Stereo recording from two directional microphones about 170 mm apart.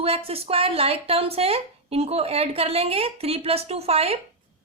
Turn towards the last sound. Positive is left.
turn(degrees=-35)  # may be behind; listen again after turning